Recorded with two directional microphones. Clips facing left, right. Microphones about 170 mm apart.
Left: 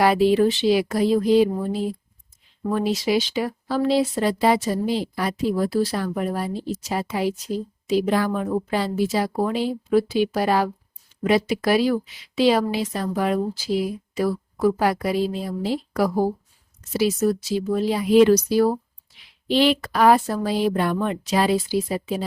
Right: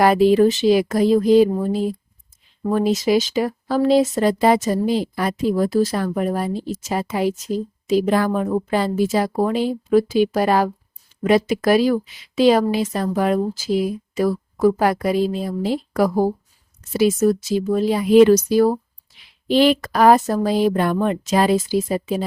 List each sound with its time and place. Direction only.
0.0 s speech: 45° right (ahead or behind)